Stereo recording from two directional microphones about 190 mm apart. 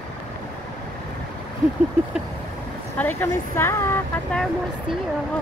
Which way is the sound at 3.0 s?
10° left (ahead or behind).